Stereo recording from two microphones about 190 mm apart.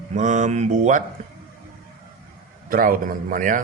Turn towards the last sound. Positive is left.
turn(degrees=-45)  # may be behind; listen again after turning